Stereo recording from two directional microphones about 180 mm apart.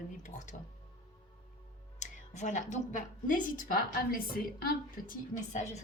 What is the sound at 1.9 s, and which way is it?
A woman's voice, 40° left (ahead or behind).